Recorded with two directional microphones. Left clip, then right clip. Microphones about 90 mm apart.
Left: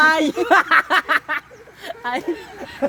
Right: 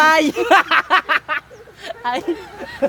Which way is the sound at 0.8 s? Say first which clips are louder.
Right 2 dB; 90° left.